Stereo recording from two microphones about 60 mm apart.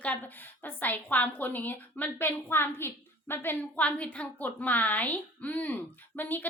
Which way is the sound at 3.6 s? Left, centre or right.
Left.